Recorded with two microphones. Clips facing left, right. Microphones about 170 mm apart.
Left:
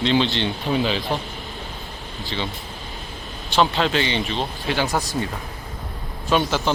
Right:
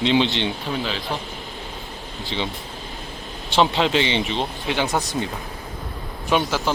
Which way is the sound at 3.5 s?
20° right (ahead or behind).